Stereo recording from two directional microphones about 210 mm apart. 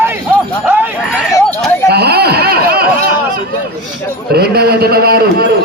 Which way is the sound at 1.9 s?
50° right (ahead or behind).